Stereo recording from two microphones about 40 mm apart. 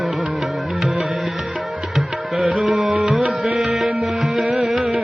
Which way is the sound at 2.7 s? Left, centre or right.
Centre.